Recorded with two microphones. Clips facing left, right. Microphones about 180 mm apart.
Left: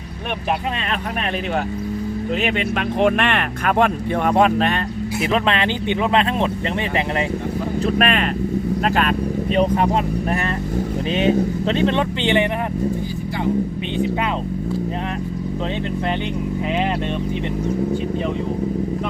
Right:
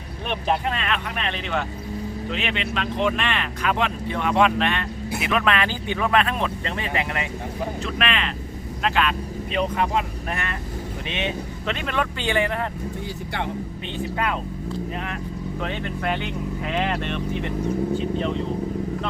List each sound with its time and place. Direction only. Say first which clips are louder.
2.3 s speech: left 6 dB; 45° left (ahead or behind)
5.2 s speech: left 3 dB; 30° left (ahead or behind)
7.9 s speech: left 9 dB; 45° left (ahead or behind)
11.1 s speech: left 11 dB; 40° left (ahead or behind); by 12.5 s 20° left (ahead or behind)